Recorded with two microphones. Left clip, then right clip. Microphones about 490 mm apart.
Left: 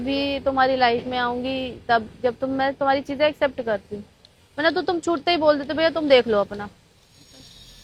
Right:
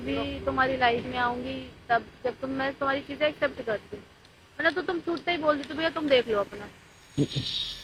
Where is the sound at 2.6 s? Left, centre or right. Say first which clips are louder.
Left 7 dB; left.